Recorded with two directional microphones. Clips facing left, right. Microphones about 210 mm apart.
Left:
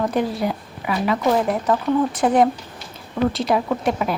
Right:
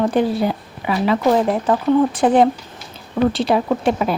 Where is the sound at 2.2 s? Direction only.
30° right (ahead or behind).